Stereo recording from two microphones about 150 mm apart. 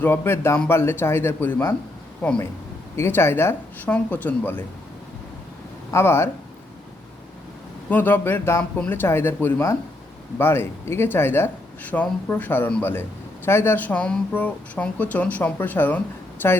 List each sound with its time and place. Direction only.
0.0 s speech: 15° left (ahead or behind)
2.9 s speech: 15° left (ahead or behind)
5.9 s speech: 15° left (ahead or behind)
7.9 s speech: 10° left (ahead or behind)